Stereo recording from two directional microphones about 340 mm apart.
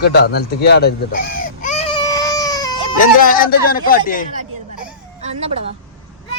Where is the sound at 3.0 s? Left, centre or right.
Left.